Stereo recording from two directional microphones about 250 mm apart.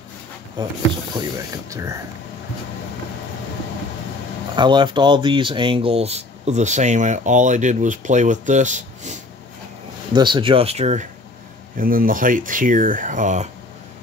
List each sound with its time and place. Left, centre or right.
0.6 s speech: centre
4.6 s speech: centre
10.1 s speech: centre